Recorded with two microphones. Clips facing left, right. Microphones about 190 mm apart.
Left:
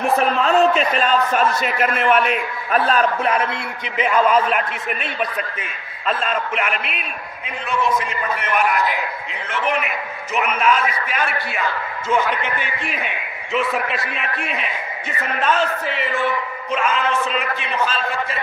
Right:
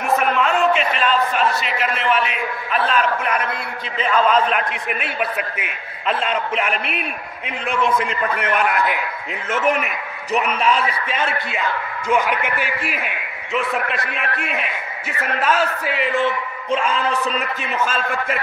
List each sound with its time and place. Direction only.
0.0 s a man's voice: 35° left (ahead or behind)
4.0 s a man's voice: 10° left (ahead or behind); by 5.7 s 5° right (ahead or behind)
9.5 s a man's voice: 45° right (ahead or behind); by 11.6 s 25° right (ahead or behind)
12.1 s a man's voice: 10° right (ahead or behind)
16.7 s a man's voice: 35° right (ahead or behind)